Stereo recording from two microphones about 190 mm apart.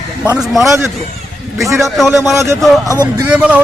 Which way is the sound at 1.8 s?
Centre (ahead or behind).